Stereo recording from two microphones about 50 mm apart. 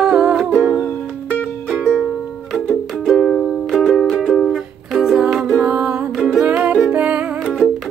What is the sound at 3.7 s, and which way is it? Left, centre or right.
Music, centre.